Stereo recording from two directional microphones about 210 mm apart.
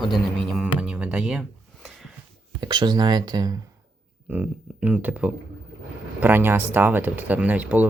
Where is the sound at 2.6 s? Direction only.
20° right (ahead or behind).